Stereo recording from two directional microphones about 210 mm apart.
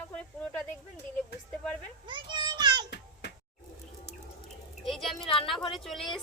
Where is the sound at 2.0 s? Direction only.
20° right (ahead or behind).